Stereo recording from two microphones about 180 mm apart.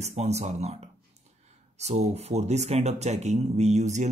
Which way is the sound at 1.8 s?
35° right (ahead or behind).